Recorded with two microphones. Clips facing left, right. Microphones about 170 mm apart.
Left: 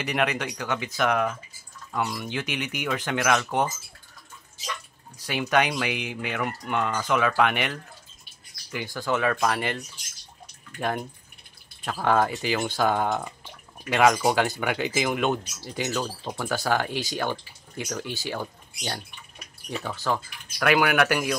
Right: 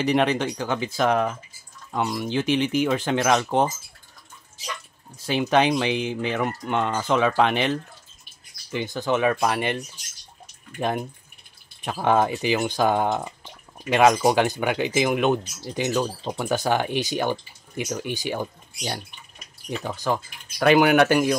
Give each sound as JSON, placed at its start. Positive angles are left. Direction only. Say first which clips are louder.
{"t": 0.0, "sound": "speech", "louder": "right 6 dB", "side_deg": -30}
{"t": 5.2, "sound": "speech", "louder": "right 4 dB", "side_deg": -25}